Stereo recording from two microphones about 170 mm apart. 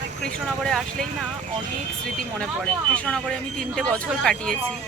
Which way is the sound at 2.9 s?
5° left (ahead or behind).